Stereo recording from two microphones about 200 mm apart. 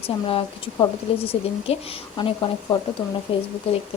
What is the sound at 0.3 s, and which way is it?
A woman's voice, 25° left (ahead or behind).